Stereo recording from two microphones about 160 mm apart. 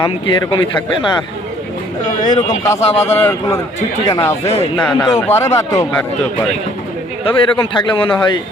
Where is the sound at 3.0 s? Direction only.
15° left (ahead or behind).